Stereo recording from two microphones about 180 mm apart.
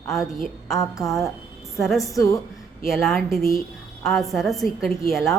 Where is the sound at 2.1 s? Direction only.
15° left (ahead or behind).